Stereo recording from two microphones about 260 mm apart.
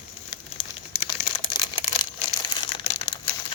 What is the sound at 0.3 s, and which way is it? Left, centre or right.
Crumpling, centre.